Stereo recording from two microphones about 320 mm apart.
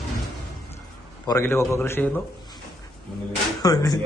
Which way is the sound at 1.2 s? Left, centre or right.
Centre.